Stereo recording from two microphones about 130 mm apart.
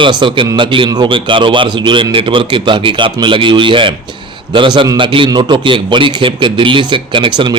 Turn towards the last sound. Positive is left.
turn(degrees=-35)  # may be behind; listen again after turning